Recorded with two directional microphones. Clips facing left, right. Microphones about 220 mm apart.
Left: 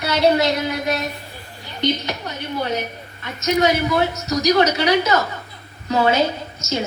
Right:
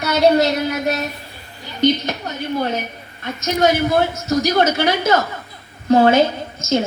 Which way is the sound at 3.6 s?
50° right (ahead or behind).